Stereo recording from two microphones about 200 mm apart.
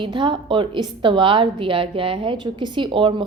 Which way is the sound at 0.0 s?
25° right (ahead or behind).